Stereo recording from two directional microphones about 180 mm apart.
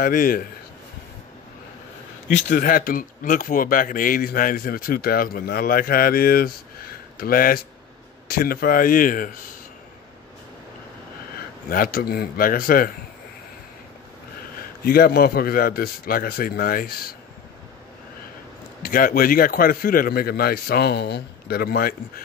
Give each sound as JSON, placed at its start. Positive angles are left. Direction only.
{"t": 0.0, "sound": "speech", "side_deg": 50}
{"t": 2.2, "sound": "speech", "side_deg": 40}
{"t": 11.3, "sound": "speech", "side_deg": 55}
{"t": 14.9, "sound": "a man's voice", "side_deg": 60}
{"t": 18.8, "sound": "a man's voice", "side_deg": 50}